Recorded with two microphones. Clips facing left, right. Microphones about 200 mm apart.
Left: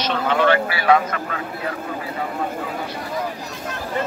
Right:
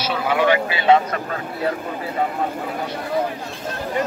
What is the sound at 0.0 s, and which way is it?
Speech, 10° right (ahead or behind).